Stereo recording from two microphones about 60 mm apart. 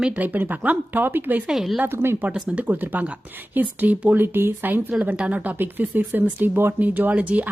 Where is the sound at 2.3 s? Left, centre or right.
Centre.